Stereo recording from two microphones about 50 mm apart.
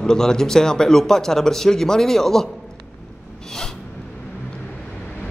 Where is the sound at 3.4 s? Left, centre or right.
Centre.